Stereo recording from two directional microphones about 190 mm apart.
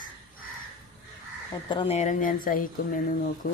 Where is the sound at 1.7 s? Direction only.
30° left (ahead or behind); by 2.9 s 50° left (ahead or behind).